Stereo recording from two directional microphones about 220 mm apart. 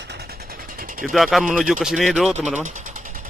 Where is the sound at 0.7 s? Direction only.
40° right (ahead or behind).